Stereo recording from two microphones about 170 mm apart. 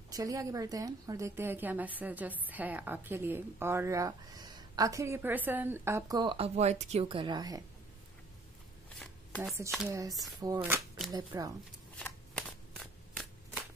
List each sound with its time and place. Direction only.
0.1 s a woman's voice: 20° right (ahead or behind)
9.8 s speech: 20° right (ahead or behind)
12.0 s shuffling cards: 5° left (ahead or behind)